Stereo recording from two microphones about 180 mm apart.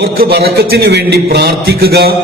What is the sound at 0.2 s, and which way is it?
A man's voice, 60° right (ahead or behind).